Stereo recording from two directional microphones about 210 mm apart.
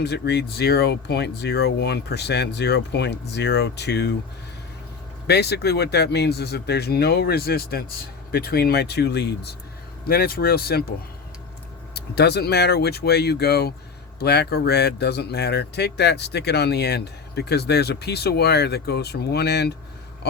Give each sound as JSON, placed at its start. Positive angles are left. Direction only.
{"t": 0.0, "sound": "speech", "side_deg": 50}
{"t": 5.3, "sound": "speech", "side_deg": 50}
{"t": 11.9, "sound": "speech", "side_deg": 50}